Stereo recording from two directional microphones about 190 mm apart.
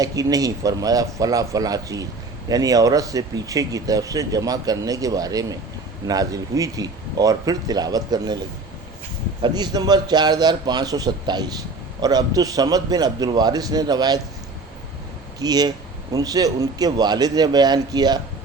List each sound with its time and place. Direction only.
0.0 s speech: 20° right (ahead or behind)
9.4 s speech: 20° right (ahead or behind)
15.4 s speech: 20° right (ahead or behind)